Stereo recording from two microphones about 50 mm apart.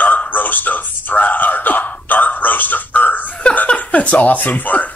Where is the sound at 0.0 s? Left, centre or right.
Left.